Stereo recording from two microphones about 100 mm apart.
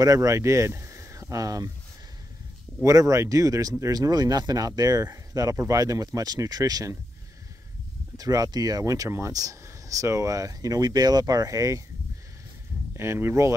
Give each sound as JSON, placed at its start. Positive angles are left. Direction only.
{"t": 0.0, "sound": "speech", "side_deg": -35}
{"t": 2.8, "sound": "speech", "side_deg": -35}
{"t": 8.2, "sound": "speech", "side_deg": -40}
{"t": 12.9, "sound": "speech", "side_deg": -25}